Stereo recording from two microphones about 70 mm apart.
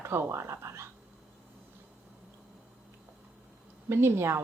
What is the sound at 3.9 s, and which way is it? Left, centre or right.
Speech, right.